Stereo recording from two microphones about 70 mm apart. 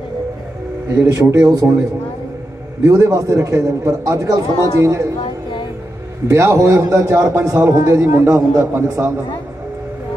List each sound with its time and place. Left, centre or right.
1.0 s a man's voice: right
1.5 s a man's voice: right
2.8 s a man's voice: right
6.2 s a man's voice: right